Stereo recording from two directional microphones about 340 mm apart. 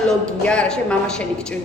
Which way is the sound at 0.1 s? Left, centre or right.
Centre.